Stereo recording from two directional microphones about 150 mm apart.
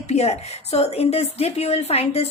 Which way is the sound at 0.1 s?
45° left (ahead or behind).